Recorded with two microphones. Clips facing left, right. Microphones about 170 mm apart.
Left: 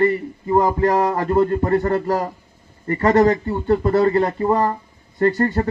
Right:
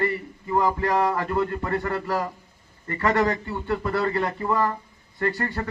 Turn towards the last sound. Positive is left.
turn(degrees=45)  # may be behind; listen again after turning